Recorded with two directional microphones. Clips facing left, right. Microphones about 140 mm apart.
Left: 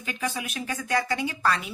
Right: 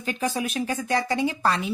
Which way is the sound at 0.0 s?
35° right (ahead or behind).